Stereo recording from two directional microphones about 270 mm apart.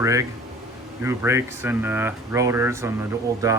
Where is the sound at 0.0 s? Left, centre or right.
Centre.